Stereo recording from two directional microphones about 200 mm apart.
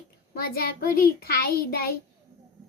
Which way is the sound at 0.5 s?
45° left (ahead or behind).